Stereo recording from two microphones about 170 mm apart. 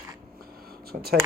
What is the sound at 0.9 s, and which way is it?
Speech, 65° right (ahead or behind).